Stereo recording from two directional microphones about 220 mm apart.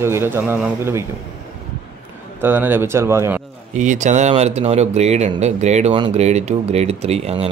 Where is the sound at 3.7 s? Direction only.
35° right (ahead or behind).